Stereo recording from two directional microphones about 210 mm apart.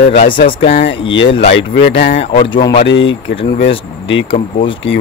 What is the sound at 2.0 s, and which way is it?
Speech, 35° left (ahead or behind).